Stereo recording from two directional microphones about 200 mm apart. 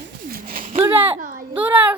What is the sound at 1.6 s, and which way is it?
Speech, 5° right (ahead or behind).